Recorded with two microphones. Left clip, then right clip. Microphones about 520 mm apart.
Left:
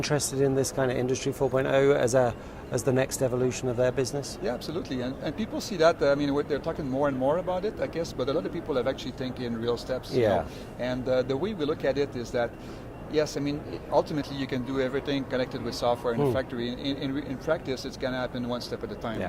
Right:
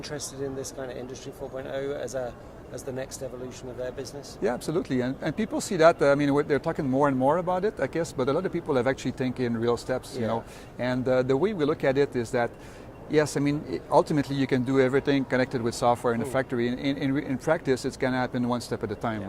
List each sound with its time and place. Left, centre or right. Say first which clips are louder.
0.0 s speech: left 8 dB; left
4.4 s speech: right 7 dB; right